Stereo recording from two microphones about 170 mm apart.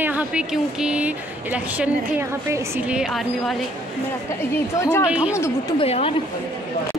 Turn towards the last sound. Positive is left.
turn(degrees=35)  # may be behind; listen again after turning